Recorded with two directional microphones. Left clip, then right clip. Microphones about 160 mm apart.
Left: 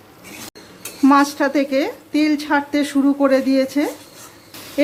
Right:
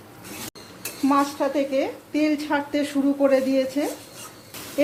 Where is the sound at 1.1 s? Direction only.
40° left (ahead or behind).